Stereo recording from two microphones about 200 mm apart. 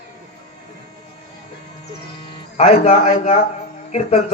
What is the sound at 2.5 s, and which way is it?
Speech, 30° left (ahead or behind).